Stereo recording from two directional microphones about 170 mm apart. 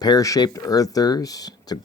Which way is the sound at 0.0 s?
20° left (ahead or behind).